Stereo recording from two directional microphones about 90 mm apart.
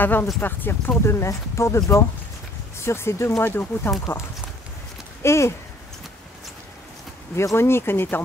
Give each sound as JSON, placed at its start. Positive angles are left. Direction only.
{"t": 0.0, "sound": "speech", "side_deg": 20}
{"t": 5.2, "sound": "speech", "side_deg": 30}
{"t": 7.3, "sound": "speech", "side_deg": 30}